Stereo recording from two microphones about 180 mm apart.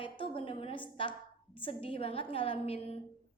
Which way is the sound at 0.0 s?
30° left (ahead or behind).